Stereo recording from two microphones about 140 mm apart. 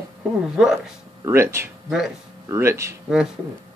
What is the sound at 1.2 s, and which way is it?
Speech, 20° right (ahead or behind).